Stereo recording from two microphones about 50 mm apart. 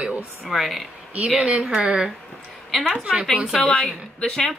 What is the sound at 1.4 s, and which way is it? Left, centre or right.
Speech, right.